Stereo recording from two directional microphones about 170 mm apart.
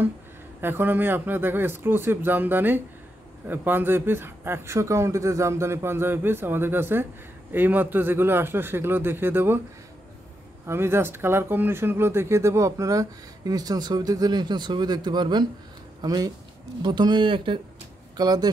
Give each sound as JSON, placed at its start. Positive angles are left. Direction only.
{"t": 0.6, "sound": "a man's voice", "side_deg": -10}
{"t": 10.7, "sound": "speech", "side_deg": -15}